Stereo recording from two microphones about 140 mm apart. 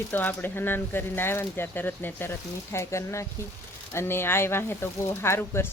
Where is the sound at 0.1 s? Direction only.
15° left (ahead or behind).